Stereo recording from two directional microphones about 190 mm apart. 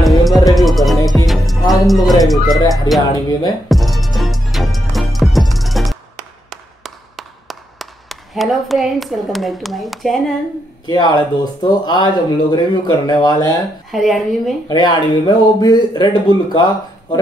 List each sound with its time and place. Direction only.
0.0 s music: centre (ahead or behind)
1.7 s speech: centre (ahead or behind)
2.9 s speech: 90° left
3.6 s music: centre (ahead or behind)
6.5 s a sound: centre (ahead or behind)
10.9 s speech: 20° left (ahead or behind)
13.9 s speech: centre (ahead or behind)
14.7 s speech: 20° left (ahead or behind)